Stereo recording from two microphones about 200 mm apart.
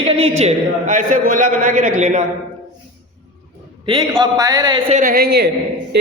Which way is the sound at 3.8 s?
20° right (ahead or behind).